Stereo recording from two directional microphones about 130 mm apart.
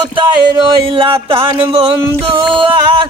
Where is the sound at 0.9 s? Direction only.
40° right (ahead or behind).